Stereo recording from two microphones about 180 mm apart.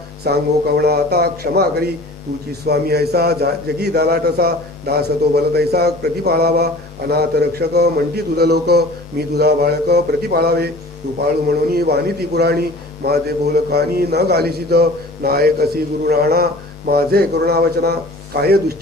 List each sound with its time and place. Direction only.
0.2 s a man's voice: 60° right (ahead or behind)